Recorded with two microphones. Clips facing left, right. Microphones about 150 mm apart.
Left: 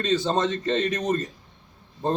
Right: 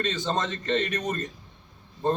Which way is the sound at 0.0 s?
30° left (ahead or behind).